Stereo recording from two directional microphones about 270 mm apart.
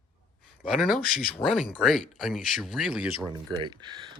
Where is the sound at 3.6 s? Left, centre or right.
Centre.